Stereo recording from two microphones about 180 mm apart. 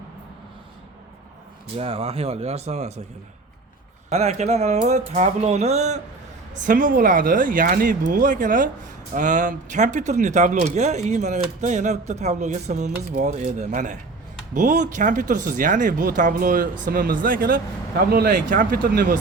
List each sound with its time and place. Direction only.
1.7 s speech: 35° right (ahead or behind)
4.1 s speech: 35° right (ahead or behind)
6.5 s speech: 50° right (ahead or behind)